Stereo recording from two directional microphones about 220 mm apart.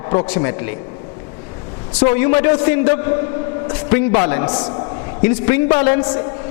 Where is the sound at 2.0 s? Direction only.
15° left (ahead or behind).